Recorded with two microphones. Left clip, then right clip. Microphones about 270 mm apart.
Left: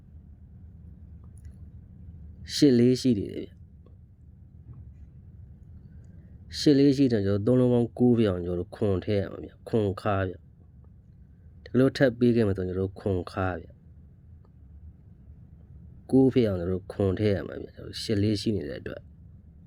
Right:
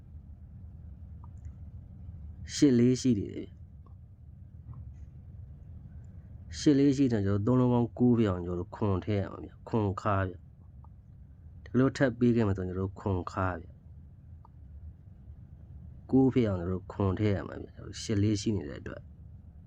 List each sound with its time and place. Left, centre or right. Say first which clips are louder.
2.4 s speech: left 4 dB; centre
6.5 s speech: left 4 dB; centre
11.6 s speech: left 5 dB; centre
16.0 s speech: left 4 dB; centre